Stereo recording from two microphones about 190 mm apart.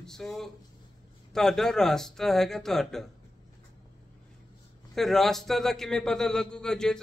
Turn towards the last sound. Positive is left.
turn(degrees=5)  # may be behind; listen again after turning